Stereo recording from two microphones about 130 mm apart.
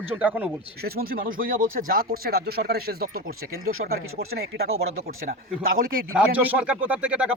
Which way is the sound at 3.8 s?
90° right.